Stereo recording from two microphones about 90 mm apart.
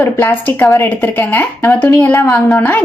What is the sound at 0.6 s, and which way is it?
Speech, 35° left (ahead or behind).